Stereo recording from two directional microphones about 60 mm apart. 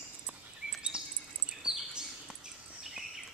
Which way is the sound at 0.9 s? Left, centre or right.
Centre.